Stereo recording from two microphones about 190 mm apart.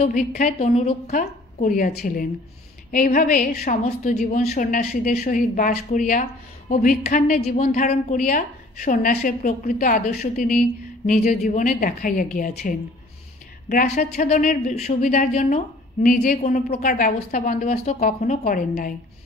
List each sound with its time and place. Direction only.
0.0 s a woman's voice: 40° left (ahead or behind)